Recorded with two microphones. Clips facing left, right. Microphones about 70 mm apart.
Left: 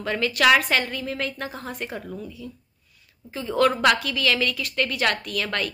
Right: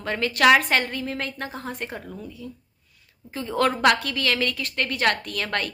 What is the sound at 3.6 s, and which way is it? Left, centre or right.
A woman's voice, right.